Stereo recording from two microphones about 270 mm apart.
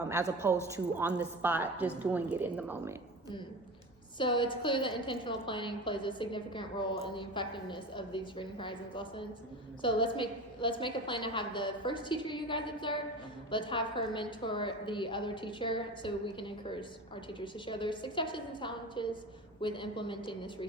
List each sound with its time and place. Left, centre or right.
0.0 s a woman's voice: centre
4.2 s a woman's voice: centre